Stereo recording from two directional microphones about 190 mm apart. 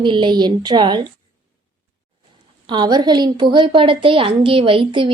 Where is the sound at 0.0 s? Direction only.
25° right (ahead or behind).